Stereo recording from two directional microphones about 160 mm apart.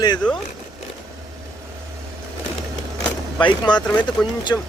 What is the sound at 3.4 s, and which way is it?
Speech, 30° left (ahead or behind).